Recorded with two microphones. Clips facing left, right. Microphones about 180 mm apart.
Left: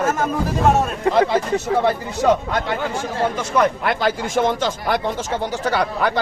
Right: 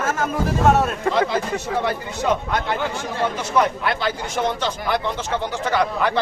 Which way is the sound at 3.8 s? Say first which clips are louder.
Left 3 dB; 45° left (ahead or behind).